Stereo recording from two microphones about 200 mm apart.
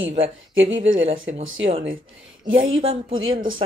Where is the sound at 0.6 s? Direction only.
70° right (ahead or behind).